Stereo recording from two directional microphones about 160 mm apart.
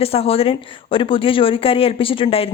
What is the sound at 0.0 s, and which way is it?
Speech, 40° left (ahead or behind).